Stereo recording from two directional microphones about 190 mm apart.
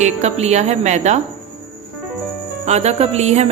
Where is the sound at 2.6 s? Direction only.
35° right (ahead or behind).